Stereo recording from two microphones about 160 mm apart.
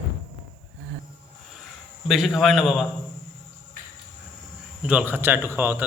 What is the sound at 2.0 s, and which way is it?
Speech, centre (ahead or behind).